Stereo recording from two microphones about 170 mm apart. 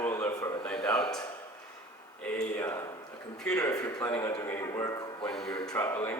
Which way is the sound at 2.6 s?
15° left (ahead or behind).